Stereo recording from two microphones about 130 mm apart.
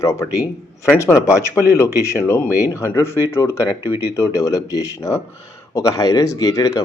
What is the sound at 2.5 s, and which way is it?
Speech, 15° right (ahead or behind).